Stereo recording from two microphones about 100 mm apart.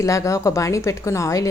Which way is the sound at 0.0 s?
30° left (ahead or behind).